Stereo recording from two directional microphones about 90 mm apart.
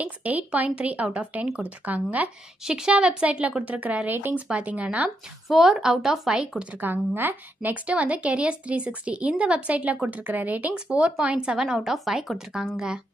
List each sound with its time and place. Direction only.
0.0 s speech: 15° right (ahead or behind)